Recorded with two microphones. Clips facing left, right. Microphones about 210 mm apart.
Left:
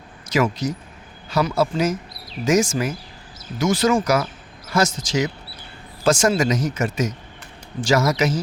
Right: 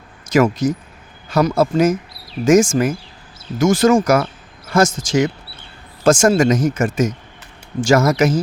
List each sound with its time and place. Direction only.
0.3 s speech: 50° right (ahead or behind)